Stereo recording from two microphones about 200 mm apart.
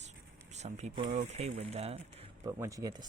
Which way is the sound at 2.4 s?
15° right (ahead or behind).